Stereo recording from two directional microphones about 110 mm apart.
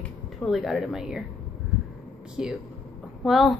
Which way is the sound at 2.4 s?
5° right (ahead or behind).